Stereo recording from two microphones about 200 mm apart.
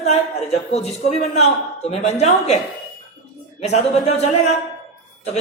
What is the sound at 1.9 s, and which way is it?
Speech, 35° left (ahead or behind).